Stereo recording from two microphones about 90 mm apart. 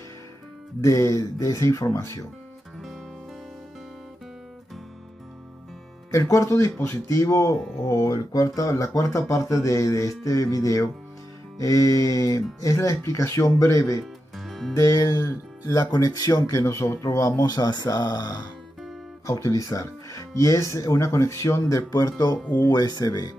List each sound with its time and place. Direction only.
0.7 s speech: 35° left (ahead or behind)
6.1 s speech: 35° left (ahead or behind)
14.4 s music: centre (ahead or behind)
14.7 s speech: 35° left (ahead or behind)
17.4 s speech: 45° left (ahead or behind)
19.2 s speech: 35° left (ahead or behind)